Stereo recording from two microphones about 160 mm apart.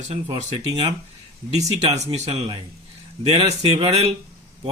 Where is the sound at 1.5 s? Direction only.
45° right (ahead or behind).